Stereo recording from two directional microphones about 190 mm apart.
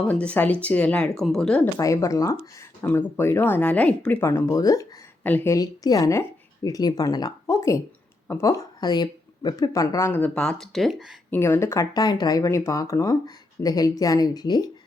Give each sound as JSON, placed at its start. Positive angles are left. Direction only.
{"t": 0.1, "sound": "speech", "side_deg": 5}
{"t": 11.3, "sound": "a woman's voice", "side_deg": 10}